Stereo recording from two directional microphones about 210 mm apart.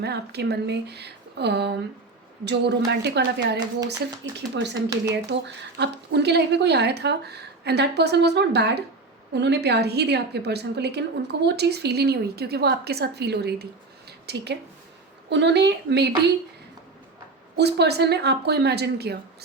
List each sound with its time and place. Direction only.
0.0 s a woman's voice: 50° right (ahead or behind)
17.6 s a woman's voice: 50° right (ahead or behind)